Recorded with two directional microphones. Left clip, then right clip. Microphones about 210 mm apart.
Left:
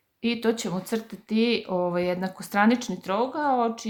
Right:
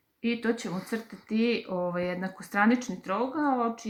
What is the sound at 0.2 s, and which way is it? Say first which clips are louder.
Speech: left 4 dB; 40° left (ahead or behind).